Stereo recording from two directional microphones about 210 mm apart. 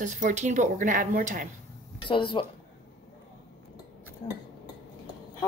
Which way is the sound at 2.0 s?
25° left (ahead or behind).